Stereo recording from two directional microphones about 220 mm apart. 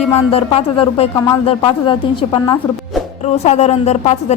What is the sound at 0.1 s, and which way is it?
A woman's voice, 30° left (ahead or behind).